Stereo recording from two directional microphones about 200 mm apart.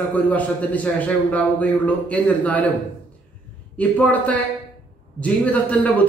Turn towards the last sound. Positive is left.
turn(degrees=5)  # may be behind; listen again after turning